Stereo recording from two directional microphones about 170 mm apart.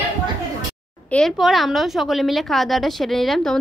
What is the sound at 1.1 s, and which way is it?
A woman's voice, centre (ahead or behind).